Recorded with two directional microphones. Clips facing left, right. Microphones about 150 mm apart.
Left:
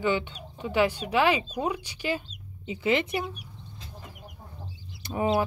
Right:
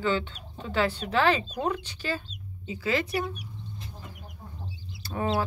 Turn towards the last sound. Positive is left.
turn(degrees=20)  # may be behind; listen again after turning